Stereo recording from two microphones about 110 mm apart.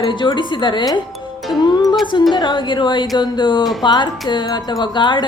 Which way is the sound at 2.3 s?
45° left (ahead or behind).